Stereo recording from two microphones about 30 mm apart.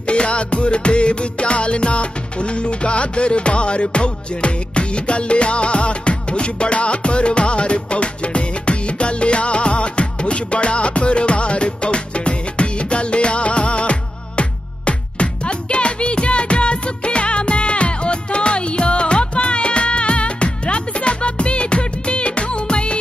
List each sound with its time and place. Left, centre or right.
0.0 s music: left